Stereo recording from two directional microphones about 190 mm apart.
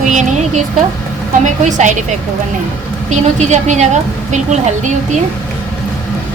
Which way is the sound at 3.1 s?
40° right (ahead or behind).